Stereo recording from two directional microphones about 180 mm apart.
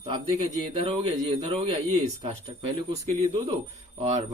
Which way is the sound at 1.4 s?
35° right (ahead or behind).